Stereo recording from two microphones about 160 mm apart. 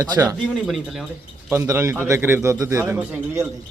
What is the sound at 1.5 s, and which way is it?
Speech, 15° right (ahead or behind).